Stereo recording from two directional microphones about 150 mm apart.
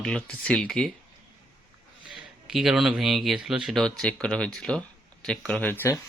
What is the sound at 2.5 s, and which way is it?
Speech, centre (ahead or behind).